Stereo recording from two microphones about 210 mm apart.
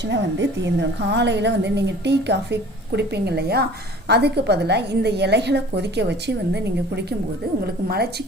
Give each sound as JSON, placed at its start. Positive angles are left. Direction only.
{"t": 0.0, "sound": "a woman's voice", "side_deg": -55}